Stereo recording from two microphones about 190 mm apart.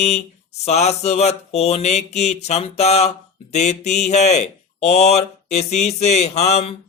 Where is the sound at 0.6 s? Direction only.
35° left (ahead or behind).